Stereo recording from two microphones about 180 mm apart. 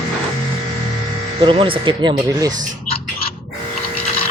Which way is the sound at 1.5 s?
30° right (ahead or behind).